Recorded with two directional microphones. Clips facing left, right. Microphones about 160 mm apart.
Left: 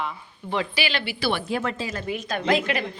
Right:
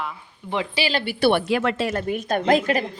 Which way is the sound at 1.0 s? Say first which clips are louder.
Right 7 dB; 55° right (ahead or behind).